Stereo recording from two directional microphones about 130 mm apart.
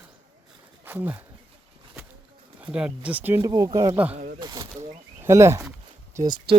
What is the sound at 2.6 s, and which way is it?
Speech, 10° right (ahead or behind).